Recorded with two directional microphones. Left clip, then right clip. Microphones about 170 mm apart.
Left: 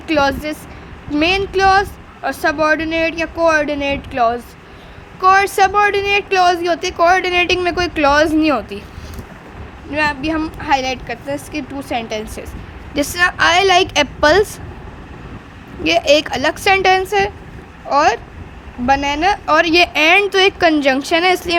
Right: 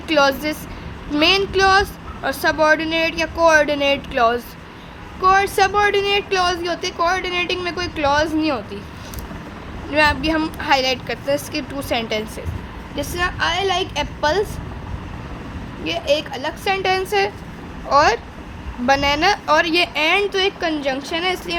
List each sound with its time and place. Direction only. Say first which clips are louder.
0.1 s speech: left 1 dB; 10° left (ahead or behind)
5.2 s speech: left 4 dB; 30° left (ahead or behind)
5.5 s a woman's voice: left 3 dB; 15° left (ahead or behind)
9.9 s speech: right 1 dB; 5° left (ahead or behind)
13.0 s speech: left 7 dB; 35° left (ahead or behind)
15.8 s a woman's voice: left 7 dB; 40° left (ahead or behind)